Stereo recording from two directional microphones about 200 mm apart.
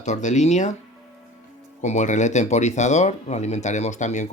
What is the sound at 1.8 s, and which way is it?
Speech, 35° left (ahead or behind).